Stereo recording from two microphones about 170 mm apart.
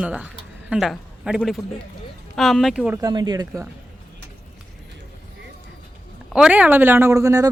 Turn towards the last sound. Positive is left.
turn(degrees=-15)  # may be behind; listen again after turning